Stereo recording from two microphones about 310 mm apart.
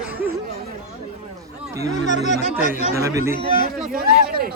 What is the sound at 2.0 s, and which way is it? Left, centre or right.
Speech, left.